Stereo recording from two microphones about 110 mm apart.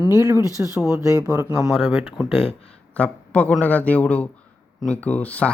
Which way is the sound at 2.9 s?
10° left (ahead or behind).